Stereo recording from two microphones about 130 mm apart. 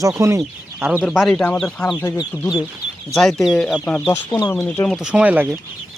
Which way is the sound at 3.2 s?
Centre (ahead or behind).